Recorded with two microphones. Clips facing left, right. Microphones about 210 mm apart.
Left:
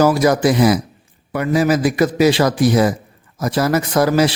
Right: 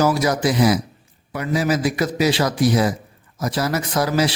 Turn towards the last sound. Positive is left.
turn(degrees=55)  # may be behind; listen again after turning